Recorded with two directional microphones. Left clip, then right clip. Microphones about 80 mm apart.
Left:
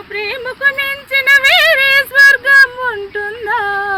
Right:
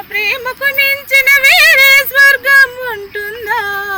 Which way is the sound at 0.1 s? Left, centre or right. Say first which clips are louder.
Right 5 dB; left.